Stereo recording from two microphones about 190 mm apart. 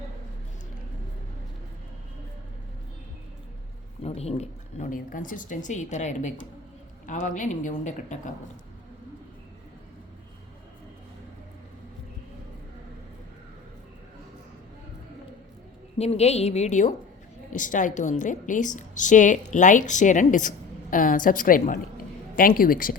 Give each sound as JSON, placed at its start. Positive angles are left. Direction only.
{"t": 4.0, "sound": "a woman's voice", "side_deg": 35}
{"t": 16.0, "sound": "a woman's voice", "side_deg": 35}